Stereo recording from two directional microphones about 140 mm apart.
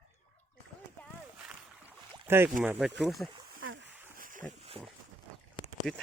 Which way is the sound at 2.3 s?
15° right (ahead or behind).